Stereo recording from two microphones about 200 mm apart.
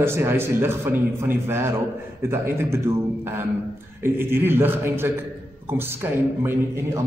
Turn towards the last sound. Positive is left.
turn(degrees=-10)  # may be behind; listen again after turning